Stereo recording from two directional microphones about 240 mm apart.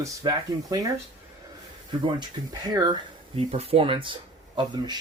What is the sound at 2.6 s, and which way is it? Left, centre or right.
Speech, centre.